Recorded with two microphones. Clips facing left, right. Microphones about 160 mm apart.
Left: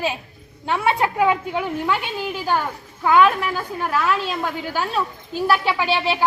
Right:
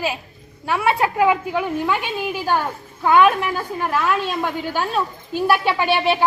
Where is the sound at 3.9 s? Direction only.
Centre (ahead or behind).